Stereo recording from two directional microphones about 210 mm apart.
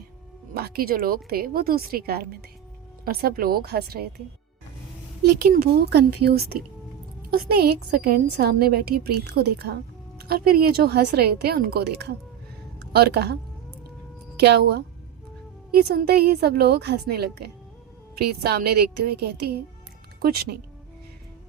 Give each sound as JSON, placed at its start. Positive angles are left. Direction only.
{"t": 0.5, "sound": "a woman's voice", "side_deg": -45}
{"t": 5.2, "sound": "a woman's voice", "side_deg": -50}
{"t": 7.3, "sound": "a woman's voice", "side_deg": -45}